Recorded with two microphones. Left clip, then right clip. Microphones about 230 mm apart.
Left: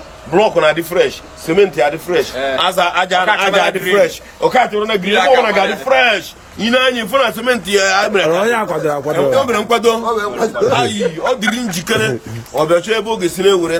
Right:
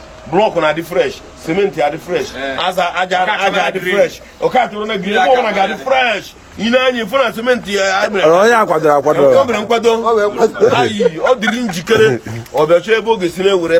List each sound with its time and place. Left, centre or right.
0.3 s a man's voice: centre
8.3 s speech: centre
9.1 s a man's voice: centre
10.1 s a man's voice: right
10.7 s a man's voice: centre